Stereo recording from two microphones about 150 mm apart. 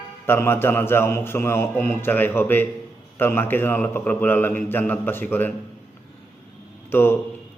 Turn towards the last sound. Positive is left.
turn(degrees=15)  # may be behind; listen again after turning